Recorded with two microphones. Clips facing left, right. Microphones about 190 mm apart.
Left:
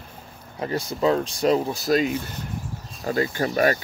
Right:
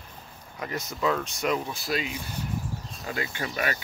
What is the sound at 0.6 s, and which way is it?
Speech, 30° left (ahead or behind).